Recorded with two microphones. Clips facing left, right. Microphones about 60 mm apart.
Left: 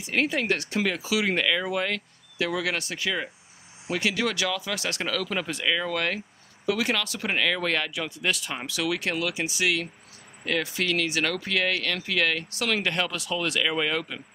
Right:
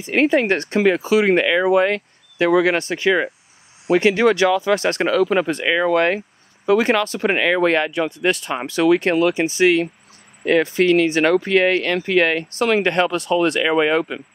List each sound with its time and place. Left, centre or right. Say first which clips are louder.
0.0 s speech: right 9 dB; right